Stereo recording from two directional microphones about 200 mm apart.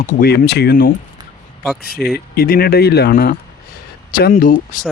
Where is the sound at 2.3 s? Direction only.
50° left (ahead or behind).